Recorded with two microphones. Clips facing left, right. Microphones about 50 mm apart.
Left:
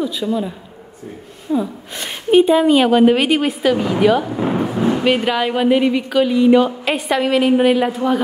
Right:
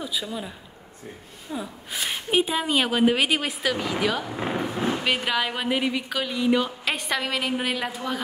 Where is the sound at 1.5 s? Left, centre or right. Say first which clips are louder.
Left 12 dB; centre.